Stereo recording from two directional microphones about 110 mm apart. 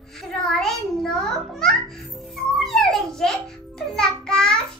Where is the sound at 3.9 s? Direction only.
5° left (ahead or behind).